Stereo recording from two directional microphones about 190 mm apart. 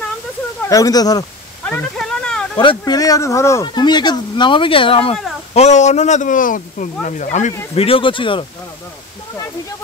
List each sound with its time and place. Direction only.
0.7 s speech: 20° left (ahead or behind)
1.6 s a sound: 5° left (ahead or behind)
2.8 s speech: 20° left (ahead or behind); by 7.5 s 40° left (ahead or behind)
7.7 s speech: 30° left (ahead or behind)